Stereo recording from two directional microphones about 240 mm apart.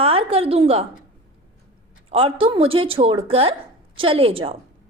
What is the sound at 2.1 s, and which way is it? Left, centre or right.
A woman's voice, right.